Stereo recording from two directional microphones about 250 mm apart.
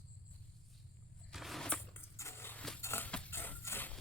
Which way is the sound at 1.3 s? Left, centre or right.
Centre.